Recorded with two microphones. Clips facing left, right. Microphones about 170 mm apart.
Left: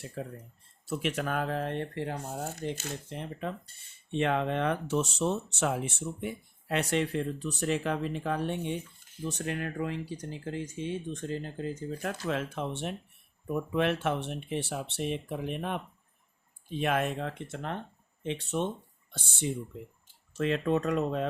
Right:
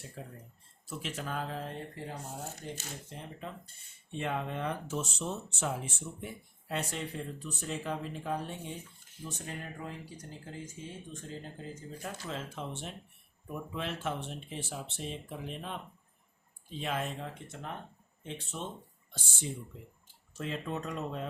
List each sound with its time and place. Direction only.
0.2 s speech: 80° left
0.9 s speech: 65° left (ahead or behind)
20.3 s speech: 80° left